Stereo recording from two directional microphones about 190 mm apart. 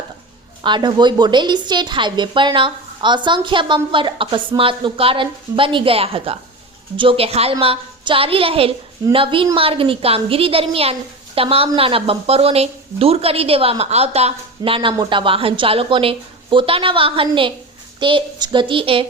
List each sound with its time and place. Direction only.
0.6 s a woman's voice: 25° right (ahead or behind)